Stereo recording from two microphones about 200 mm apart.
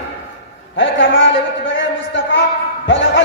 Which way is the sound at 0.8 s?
65° left (ahead or behind).